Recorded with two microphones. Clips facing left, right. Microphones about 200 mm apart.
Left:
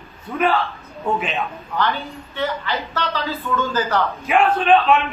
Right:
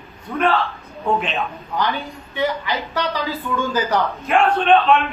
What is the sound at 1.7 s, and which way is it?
A man's voice, 15° right (ahead or behind).